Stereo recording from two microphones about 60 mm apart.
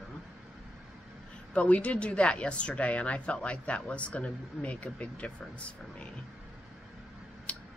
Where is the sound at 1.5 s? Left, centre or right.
Left.